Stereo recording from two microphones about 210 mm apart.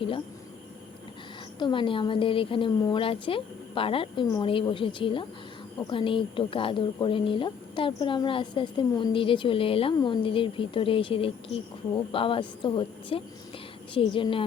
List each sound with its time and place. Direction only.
1.5 s speech: 25° left (ahead or behind)